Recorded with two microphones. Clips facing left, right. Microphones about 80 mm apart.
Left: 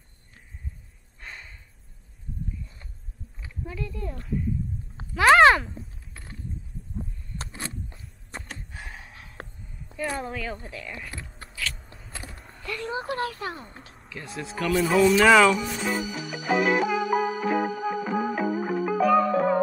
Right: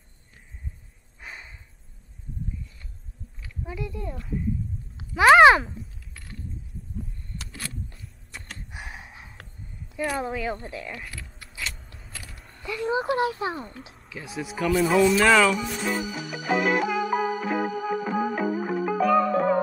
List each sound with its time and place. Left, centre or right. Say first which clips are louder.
1.2 s snort: right 1 dB; centre
3.6 s speech: right 1 dB; centre
5.8 s mechanisms: even; left
7.5 s a sound: right 1 dB; left
8.6 s a sound: right 2 dB; centre
9.9 s a sound: right 2 dB; left
10.2 s speech: right 4 dB; centre
11.4 s gears: left 3 dB; left
12.6 s speech: right 5 dB; centre
14.0 s music: right 2 dB; centre